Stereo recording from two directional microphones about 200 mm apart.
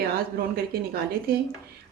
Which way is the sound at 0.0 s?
50° right (ahead or behind).